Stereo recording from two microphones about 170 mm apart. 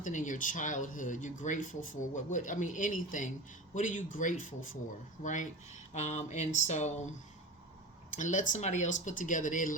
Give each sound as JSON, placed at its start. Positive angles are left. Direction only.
{"t": 0.0, "sound": "speech", "side_deg": 50}
{"t": 8.1, "sound": "speech", "side_deg": 45}